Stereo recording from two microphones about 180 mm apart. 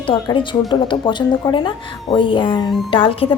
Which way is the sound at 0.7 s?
25° left (ahead or behind).